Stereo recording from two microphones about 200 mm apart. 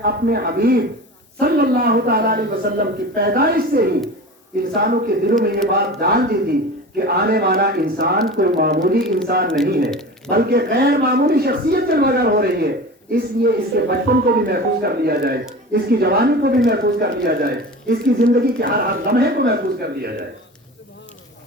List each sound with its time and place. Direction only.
0.0 s speech: 50° right (ahead or behind)